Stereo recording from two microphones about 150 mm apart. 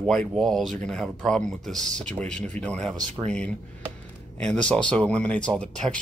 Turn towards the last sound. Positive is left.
turn(degrees=5)  # may be behind; listen again after turning